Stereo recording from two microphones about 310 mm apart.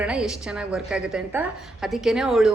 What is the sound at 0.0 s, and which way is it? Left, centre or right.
A man's voice, centre.